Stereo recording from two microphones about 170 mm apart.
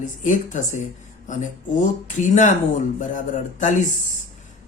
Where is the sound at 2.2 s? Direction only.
45° left (ahead or behind).